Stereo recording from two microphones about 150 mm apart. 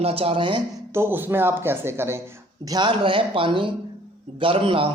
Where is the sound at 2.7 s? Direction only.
30° right (ahead or behind).